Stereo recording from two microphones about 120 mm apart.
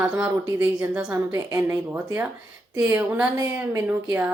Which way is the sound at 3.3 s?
25° right (ahead or behind).